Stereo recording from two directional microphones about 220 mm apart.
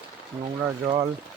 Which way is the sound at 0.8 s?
20° right (ahead or behind).